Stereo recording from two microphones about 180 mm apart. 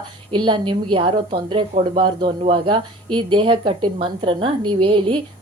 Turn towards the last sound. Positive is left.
turn(degrees=-30)  # may be behind; listen again after turning